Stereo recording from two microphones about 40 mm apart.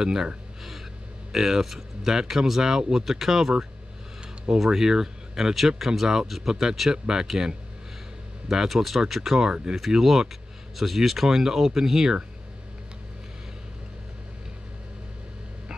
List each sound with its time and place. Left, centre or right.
0.0 s speech: centre
1.3 s speech: centre
8.6 s speech: centre
9.4 s speech: right
9.8 s speech: centre